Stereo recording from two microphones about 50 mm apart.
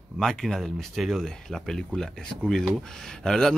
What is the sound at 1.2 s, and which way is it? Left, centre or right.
Speech, centre.